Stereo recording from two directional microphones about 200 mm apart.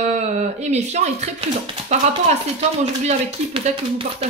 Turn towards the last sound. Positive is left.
turn(degrees=-30)  # may be behind; listen again after turning